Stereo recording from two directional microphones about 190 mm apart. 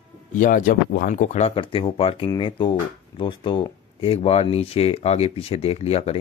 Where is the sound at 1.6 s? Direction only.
30° left (ahead or behind).